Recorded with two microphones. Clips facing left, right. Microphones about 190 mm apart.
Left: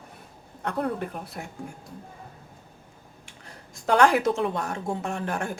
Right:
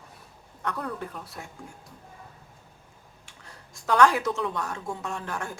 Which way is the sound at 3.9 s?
60° left (ahead or behind).